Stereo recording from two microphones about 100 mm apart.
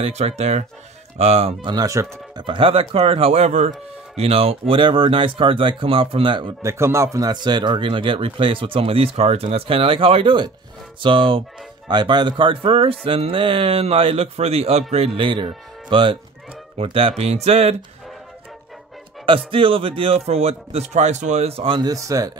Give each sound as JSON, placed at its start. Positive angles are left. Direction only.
{"t": 0.0, "sound": "mantra", "side_deg": -90}
{"t": 1.6, "sound": "speech", "side_deg": -40}
{"t": 2.3, "sound": "speech", "side_deg": -55}
{"t": 6.6, "sound": "speech", "side_deg": -25}
{"t": 17.2, "sound": "mantra", "side_deg": -90}
{"t": 19.2, "sound": "speech", "side_deg": -60}
{"t": 21.7, "sound": "speech", "side_deg": -35}